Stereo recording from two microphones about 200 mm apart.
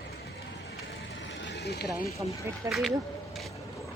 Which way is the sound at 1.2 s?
65° left (ahead or behind).